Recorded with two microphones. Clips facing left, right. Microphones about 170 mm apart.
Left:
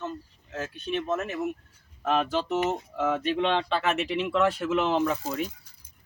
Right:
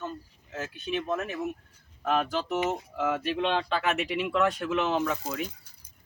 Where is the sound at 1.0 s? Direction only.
5° left (ahead or behind).